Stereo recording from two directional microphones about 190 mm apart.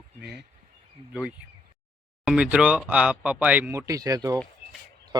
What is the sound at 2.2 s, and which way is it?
Speech, 5° right (ahead or behind).